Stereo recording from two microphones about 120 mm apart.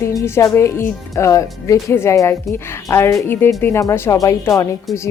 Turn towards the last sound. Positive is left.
turn(degrees=25)  # may be behind; listen again after turning